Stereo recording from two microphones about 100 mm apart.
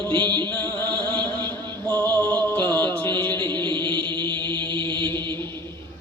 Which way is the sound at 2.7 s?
15° left (ahead or behind).